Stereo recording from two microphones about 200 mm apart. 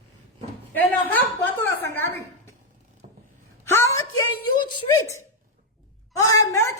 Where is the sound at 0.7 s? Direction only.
10° left (ahead or behind).